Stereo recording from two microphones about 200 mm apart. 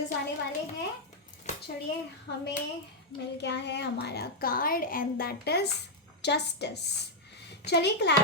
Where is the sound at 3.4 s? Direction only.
60° left (ahead or behind).